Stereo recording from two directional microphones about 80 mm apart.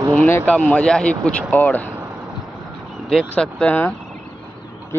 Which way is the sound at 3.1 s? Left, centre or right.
Centre.